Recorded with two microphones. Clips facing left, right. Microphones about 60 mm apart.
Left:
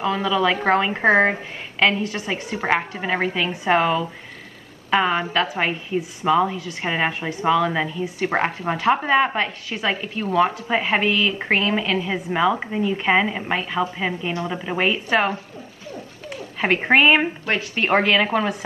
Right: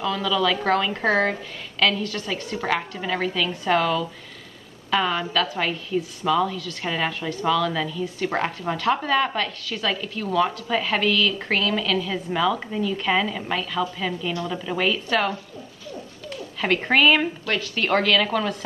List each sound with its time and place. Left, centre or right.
0.0 s a woman's voice: left
16.6 s a woman's voice: left